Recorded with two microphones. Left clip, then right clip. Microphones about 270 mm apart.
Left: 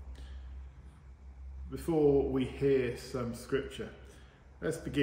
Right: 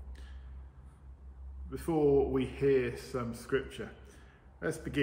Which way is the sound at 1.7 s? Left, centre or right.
Centre.